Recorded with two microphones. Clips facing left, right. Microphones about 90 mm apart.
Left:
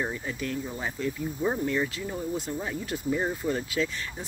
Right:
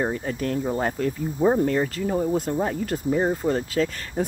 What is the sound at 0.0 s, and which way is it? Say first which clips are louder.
Speech: right 6 dB; 45° right (ahead or behind).